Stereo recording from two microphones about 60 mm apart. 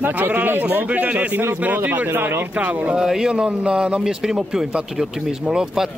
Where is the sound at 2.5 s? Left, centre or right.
Right.